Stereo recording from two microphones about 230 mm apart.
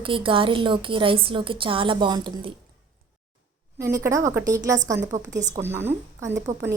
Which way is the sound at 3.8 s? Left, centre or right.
Centre.